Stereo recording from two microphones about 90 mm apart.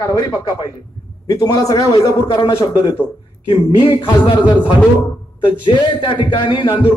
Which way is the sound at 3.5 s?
65° left (ahead or behind).